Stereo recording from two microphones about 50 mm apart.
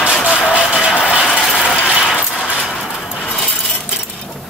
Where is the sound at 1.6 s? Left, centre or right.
Centre.